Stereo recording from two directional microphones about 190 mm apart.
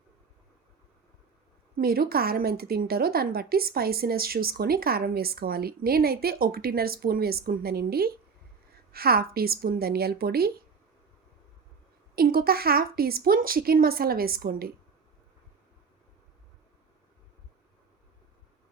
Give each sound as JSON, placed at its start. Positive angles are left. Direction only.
{"t": 1.7, "sound": "a woman's voice", "side_deg": -55}
{"t": 12.1, "sound": "a woman's voice", "side_deg": -50}